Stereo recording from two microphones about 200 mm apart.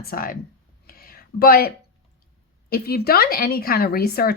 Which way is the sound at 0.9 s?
45° left (ahead or behind).